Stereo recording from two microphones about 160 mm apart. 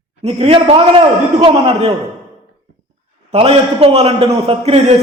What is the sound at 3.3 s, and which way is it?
A man's voice, 40° right (ahead or behind).